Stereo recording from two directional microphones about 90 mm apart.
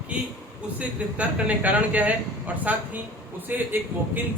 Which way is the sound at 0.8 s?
15° right (ahead or behind).